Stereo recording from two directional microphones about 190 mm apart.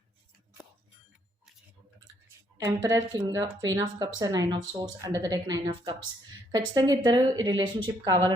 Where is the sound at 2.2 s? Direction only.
15° right (ahead or behind).